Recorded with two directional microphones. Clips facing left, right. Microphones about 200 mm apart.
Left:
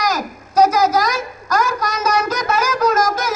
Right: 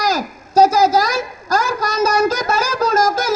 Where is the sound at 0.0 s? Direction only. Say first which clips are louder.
Right 2 dB; 30° right (ahead or behind).